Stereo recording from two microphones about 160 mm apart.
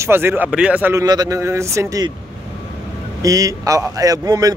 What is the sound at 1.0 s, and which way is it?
A man's voice, 25° right (ahead or behind).